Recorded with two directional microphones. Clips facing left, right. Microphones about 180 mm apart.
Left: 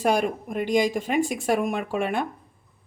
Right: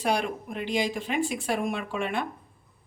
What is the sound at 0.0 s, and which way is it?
Speech, 45° left (ahead or behind).